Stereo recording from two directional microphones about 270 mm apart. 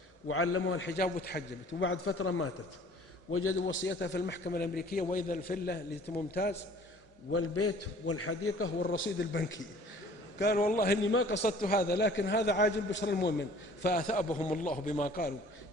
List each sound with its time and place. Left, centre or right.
0.3 s a man's voice: left
7.3 s a man's voice: left
11.4 s a man's voice: left